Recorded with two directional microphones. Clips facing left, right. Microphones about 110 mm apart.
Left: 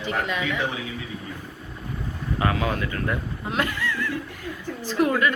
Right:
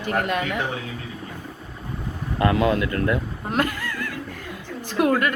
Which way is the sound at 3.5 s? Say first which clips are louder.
Right 2 dB; 45° right (ahead or behind).